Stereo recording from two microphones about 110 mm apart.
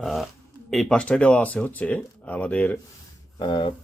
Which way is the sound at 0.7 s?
5° left (ahead or behind).